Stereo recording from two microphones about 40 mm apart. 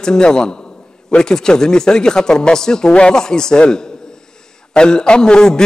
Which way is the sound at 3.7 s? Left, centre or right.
Centre.